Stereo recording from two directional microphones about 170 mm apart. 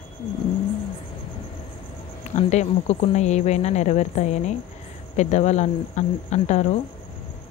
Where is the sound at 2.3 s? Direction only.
40° left (ahead or behind).